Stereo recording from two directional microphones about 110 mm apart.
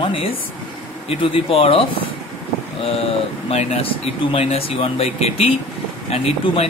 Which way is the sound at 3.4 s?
65° left (ahead or behind).